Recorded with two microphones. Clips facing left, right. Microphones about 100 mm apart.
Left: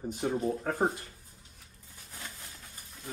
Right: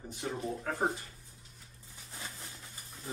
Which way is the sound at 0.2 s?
35° left (ahead or behind).